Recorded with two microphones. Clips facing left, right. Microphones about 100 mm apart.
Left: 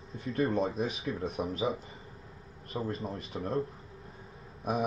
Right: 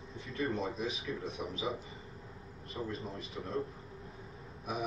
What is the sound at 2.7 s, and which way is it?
Speech, 35° left (ahead or behind).